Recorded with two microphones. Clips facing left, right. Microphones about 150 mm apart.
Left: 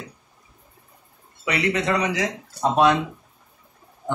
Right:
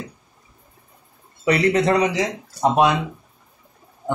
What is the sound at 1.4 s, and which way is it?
A man's voice, 40° right (ahead or behind).